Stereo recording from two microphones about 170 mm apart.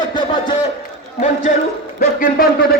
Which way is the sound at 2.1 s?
60° left (ahead or behind).